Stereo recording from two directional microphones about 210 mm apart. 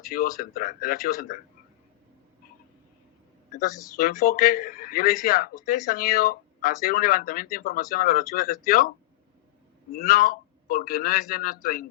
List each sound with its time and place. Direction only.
0.1 s speech: 45° left (ahead or behind)
3.9 s speech: 45° left (ahead or behind)
9.9 s speech: 45° left (ahead or behind)